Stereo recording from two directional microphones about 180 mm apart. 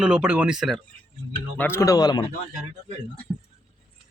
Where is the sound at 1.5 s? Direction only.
10° left (ahead or behind).